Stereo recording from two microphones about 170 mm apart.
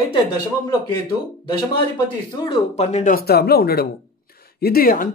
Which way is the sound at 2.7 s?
40° left (ahead or behind).